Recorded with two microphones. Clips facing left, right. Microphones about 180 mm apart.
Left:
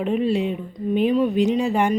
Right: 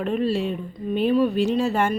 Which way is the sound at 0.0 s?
15° left (ahead or behind).